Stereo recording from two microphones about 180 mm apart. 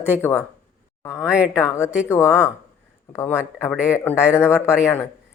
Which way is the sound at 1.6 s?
15° left (ahead or behind).